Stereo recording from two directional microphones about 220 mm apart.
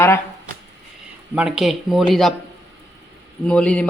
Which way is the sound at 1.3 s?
5° right (ahead or behind).